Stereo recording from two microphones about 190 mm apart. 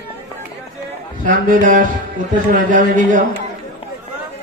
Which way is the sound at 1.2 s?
45° right (ahead or behind).